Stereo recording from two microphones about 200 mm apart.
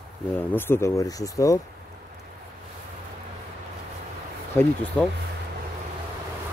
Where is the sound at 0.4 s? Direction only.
10° left (ahead or behind).